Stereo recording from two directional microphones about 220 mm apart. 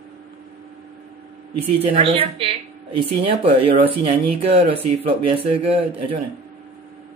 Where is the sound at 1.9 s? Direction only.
25° right (ahead or behind).